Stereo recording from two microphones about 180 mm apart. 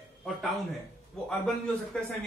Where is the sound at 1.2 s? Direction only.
5° left (ahead or behind).